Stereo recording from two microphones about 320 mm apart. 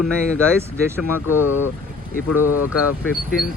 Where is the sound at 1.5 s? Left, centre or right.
Left.